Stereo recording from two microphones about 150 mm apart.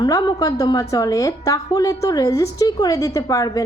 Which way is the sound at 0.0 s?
25° left (ahead or behind).